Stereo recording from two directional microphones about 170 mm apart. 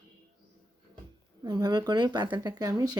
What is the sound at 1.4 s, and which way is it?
Speech, 25° right (ahead or behind).